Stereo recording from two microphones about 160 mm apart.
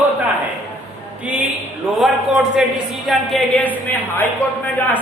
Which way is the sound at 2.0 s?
5° right (ahead or behind).